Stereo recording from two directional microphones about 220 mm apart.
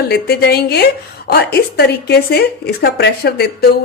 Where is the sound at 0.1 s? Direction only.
45° left (ahead or behind).